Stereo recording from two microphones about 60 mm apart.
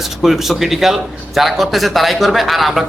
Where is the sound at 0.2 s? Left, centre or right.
Centre.